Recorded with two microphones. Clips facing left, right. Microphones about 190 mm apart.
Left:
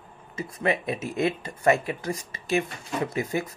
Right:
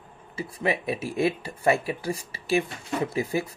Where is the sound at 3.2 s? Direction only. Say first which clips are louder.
Right 1 dB; 30° right (ahead or behind).